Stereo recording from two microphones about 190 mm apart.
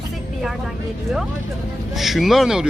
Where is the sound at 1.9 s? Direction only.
Centre (ahead or behind).